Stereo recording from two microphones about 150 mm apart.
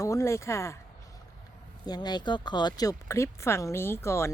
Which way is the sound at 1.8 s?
25° left (ahead or behind).